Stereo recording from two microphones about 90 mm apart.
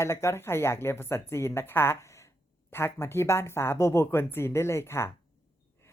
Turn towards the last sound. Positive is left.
turn(degrees=30)  # may be behind; listen again after turning